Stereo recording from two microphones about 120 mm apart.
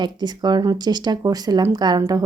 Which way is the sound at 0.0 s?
35° right (ahead or behind).